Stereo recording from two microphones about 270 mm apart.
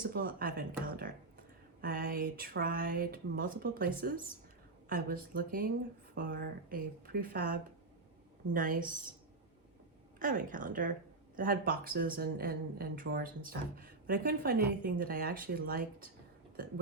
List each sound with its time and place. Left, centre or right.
0.0 s speech: right
1.8 s speech: right
10.2 s speech: right